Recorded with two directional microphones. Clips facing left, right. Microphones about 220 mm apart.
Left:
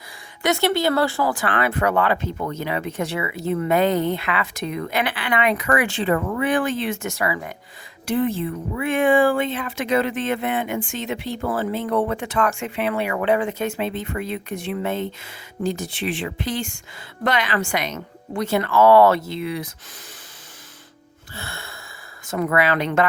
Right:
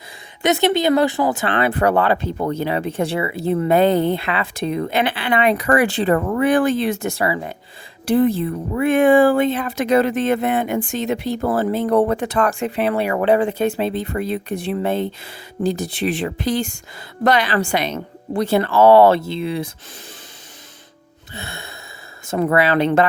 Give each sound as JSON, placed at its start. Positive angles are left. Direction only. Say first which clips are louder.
{"t": 0.4, "sound": "speech", "louder": "right 3 dB", "side_deg": -20}
{"t": 21.3, "sound": "gasp", "louder": "right 3 dB", "side_deg": -20}
{"t": 22.3, "sound": "speech", "louder": "right 3 dB", "side_deg": -30}